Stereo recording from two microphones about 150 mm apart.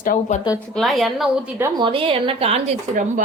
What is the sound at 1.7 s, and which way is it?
Speech, 35° right (ahead or behind).